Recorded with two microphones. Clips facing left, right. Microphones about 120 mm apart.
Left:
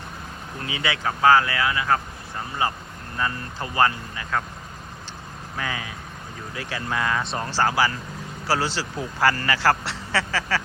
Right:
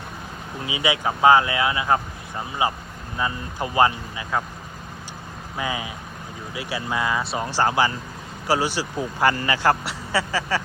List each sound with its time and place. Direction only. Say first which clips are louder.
0.6 s speech: right 3 dB; 15° right (ahead or behind)
5.5 s speech: right 3 dB; 15° right (ahead or behind)